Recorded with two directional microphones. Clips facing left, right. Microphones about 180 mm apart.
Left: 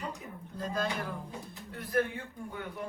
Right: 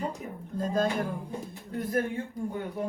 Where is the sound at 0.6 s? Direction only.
45° right (ahead or behind).